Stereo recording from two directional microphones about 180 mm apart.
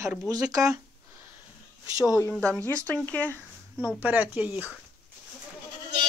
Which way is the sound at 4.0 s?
10° right (ahead or behind).